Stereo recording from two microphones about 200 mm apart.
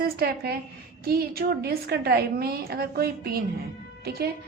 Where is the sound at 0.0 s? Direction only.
50° right (ahead or behind).